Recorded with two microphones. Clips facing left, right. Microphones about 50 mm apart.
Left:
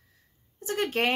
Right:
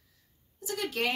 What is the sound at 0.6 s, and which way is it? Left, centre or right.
Speech, left.